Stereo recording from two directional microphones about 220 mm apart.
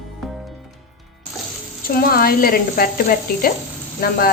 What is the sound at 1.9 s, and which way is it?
Speech, 40° left (ahead or behind).